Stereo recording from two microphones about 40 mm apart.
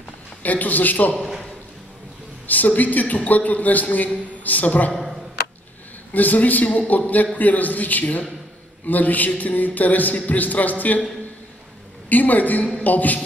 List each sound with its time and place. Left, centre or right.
0.4 s music: left
2.4 s music: left
4.4 s a woman's voice: left
6.1 s music: left
12.1 s music: left